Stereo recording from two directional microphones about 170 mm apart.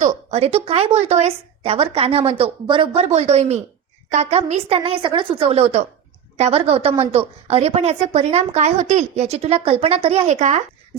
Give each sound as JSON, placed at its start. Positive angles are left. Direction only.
{"t": 0.0, "sound": "a woman's voice", "side_deg": -40}